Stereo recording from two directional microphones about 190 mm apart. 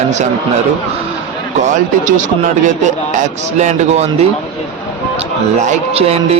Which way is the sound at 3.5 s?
35° right (ahead or behind).